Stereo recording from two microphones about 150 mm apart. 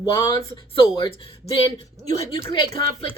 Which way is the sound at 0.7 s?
35° left (ahead or behind).